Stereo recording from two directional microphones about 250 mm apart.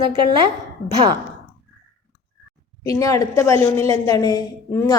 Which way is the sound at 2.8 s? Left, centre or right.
Centre.